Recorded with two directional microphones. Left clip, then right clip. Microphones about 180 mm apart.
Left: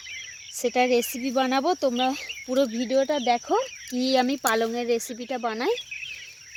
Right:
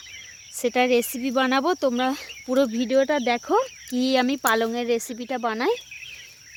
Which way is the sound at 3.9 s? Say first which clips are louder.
Right 1 dB; centre (ahead or behind).